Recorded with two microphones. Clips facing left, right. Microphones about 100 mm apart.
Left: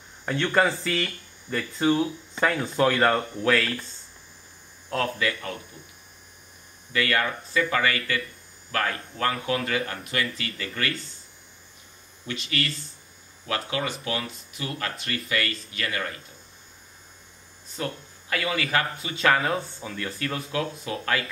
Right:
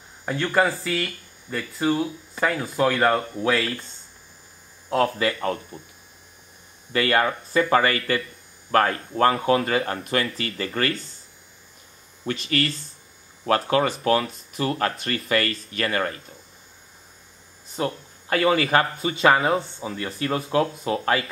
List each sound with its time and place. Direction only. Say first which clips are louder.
0.2 s speech: right 1 dB; 10° right (ahead or behind)
4.9 s speech: right 5 dB; 35° right (ahead or behind)
6.9 s speech: right 4 dB; 35° right (ahead or behind)
12.3 s speech: right 6 dB; 45° right (ahead or behind)
17.7 s speech: right 5 dB; 35° right (ahead or behind)
19.2 s speech: right 4 dB; 20° right (ahead or behind)